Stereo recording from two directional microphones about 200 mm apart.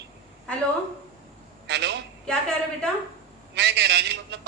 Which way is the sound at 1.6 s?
60° right (ahead or behind).